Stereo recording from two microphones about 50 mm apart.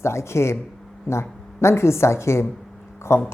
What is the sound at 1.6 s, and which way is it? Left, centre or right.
A woman's voice, left.